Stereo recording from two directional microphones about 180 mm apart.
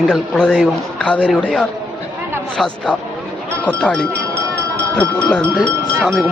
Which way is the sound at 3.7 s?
5° left (ahead or behind).